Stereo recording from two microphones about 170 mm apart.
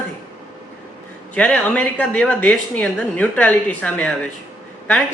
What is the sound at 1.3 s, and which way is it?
A woman's voice, 5° left (ahead or behind).